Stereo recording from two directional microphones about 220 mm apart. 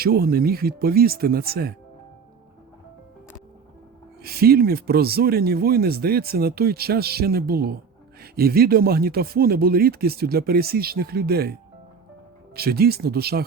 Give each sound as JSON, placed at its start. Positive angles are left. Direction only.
{"t": 0.0, "sound": "speech", "side_deg": -45}
{"t": 4.2, "sound": "speech", "side_deg": -45}
{"t": 12.5, "sound": "speech", "side_deg": -45}